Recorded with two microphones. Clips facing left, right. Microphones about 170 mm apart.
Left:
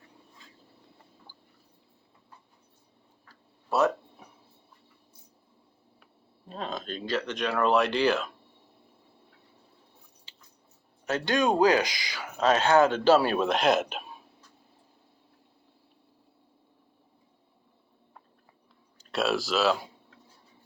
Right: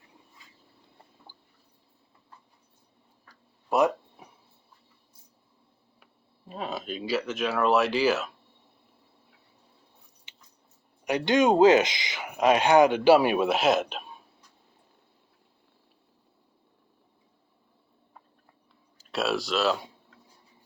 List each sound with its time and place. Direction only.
3.2 s a sound: 15° right (ahead or behind)
6.5 s speech: 10° right (ahead or behind)
10.3 s chewing: 20° right (ahead or behind)
11.0 s speech: 15° right (ahead or behind); by 14.2 s centre (ahead or behind)
18.9 s speech: centre (ahead or behind)